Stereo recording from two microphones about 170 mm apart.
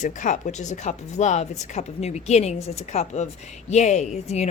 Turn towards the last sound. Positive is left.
turn(degrees=40)  # may be behind; listen again after turning